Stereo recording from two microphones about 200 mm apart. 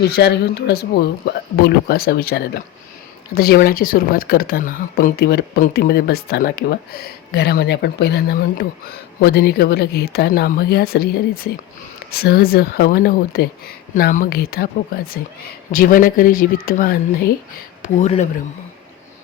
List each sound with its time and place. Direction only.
0.0 s speech: 55° left (ahead or behind); by 18.3 s 35° left (ahead or behind)